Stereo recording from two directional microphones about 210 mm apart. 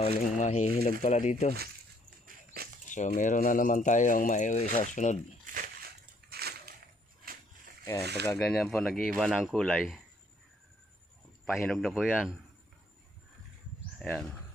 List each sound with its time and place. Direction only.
0.0 s speech: 30° left (ahead or behind)
2.2 s dog: 45° right (ahead or behind)
2.9 s speech: 35° left (ahead or behind)
5.5 s a sound: 40° right (ahead or behind)
8.0 s speech: 50° right (ahead or behind)
8.3 s speech: 5° left (ahead or behind)
11.4 s speech: centre (ahead or behind)
14.0 s speech: centre (ahead or behind)